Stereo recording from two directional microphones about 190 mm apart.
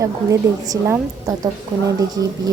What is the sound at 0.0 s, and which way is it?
A woman's voice, 20° right (ahead or behind).